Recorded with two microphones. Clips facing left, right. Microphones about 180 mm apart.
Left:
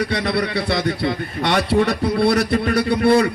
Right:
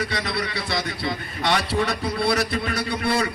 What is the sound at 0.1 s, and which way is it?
A man's voice, 55° left (ahead or behind).